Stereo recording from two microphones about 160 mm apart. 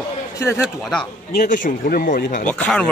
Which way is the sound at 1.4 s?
55° left (ahead or behind).